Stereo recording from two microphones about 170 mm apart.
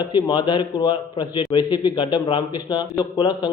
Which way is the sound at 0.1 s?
30° left (ahead or behind).